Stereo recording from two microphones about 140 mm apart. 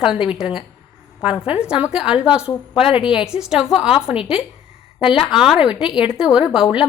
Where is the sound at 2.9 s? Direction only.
40° left (ahead or behind).